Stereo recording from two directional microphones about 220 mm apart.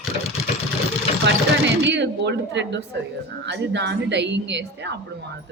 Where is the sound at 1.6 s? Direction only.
55° right (ahead or behind).